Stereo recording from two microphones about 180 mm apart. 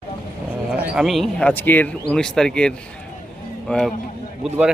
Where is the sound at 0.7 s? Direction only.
Centre (ahead or behind).